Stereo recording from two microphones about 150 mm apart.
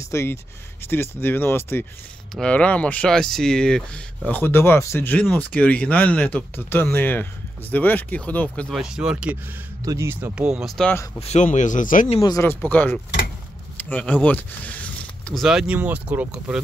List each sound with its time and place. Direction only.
0.1 s speech: 15° left (ahead or behind)
8.7 s speech: 5° right (ahead or behind)
10.3 s speech: 5° right (ahead or behind)
11.1 s speech: 50° left (ahead or behind)
12.2 s speech: 25° left (ahead or behind)
12.4 s speech: 10° left (ahead or behind)
15.4 s speech: 5° right (ahead or behind)